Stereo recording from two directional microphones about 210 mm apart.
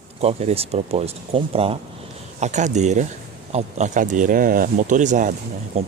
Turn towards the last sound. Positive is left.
turn(degrees=-30)  # may be behind; listen again after turning